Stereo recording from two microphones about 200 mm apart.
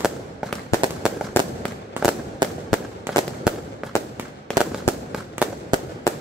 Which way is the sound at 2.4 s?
20° right (ahead or behind).